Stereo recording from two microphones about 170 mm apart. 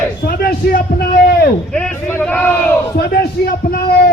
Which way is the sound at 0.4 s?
65° left (ahead or behind).